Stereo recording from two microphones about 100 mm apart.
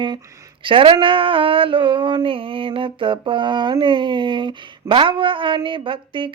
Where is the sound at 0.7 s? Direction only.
55° right (ahead or behind).